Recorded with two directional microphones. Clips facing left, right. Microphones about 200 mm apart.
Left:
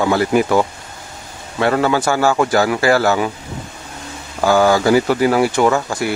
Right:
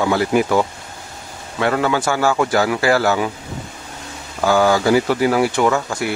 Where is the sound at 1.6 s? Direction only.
35° left (ahead or behind).